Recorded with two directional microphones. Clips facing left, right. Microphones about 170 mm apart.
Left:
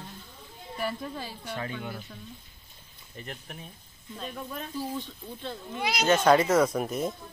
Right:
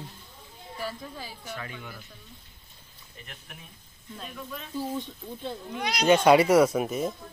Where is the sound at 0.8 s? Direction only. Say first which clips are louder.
Left 4 dB; 60° left (ahead or behind).